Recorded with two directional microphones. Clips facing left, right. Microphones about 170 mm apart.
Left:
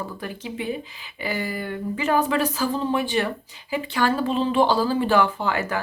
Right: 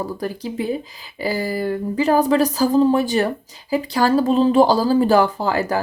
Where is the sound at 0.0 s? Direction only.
35° right (ahead or behind).